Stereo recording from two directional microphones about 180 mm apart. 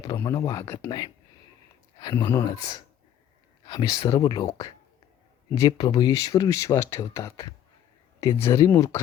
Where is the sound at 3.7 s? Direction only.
25° left (ahead or behind).